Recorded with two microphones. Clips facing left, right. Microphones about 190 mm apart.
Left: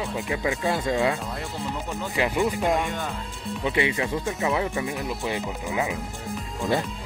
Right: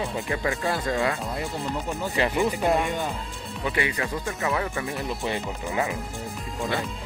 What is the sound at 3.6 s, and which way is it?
Speech, 20° left (ahead or behind).